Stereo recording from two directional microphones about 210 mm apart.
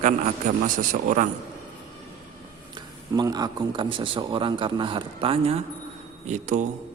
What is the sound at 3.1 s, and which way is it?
A man's voice, 20° right (ahead or behind).